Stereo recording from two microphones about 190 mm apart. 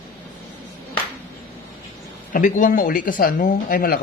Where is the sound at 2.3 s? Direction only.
45° left (ahead or behind).